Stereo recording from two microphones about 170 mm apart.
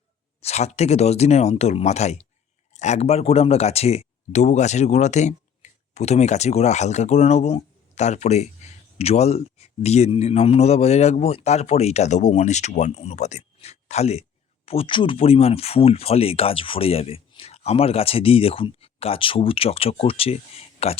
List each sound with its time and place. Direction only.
0.4 s speech: 40° left (ahead or behind)